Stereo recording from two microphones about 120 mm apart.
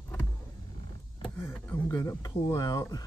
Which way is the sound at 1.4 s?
15° left (ahead or behind).